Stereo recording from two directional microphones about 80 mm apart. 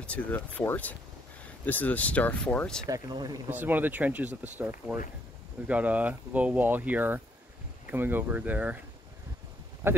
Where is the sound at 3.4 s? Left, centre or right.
Right.